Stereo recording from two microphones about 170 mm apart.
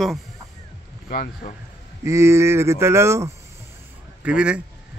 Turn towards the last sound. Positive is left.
turn(degrees=-5)  # may be behind; listen again after turning